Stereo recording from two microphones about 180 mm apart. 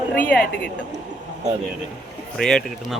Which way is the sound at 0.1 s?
10° left (ahead or behind).